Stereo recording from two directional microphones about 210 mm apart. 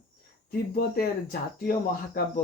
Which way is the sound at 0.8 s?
45° left (ahead or behind).